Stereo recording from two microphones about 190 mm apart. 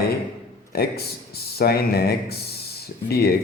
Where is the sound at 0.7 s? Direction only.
55° left (ahead or behind).